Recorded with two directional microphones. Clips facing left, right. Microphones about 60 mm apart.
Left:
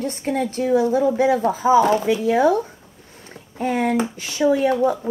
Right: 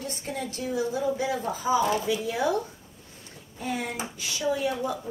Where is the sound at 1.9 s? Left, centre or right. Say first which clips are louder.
Left 9 dB; left.